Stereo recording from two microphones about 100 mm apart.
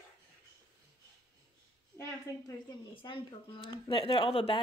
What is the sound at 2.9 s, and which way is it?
Speech, 55° left (ahead or behind).